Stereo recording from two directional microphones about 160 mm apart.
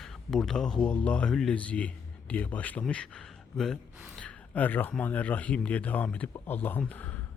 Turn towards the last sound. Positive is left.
turn(degrees=10)  # may be behind; listen again after turning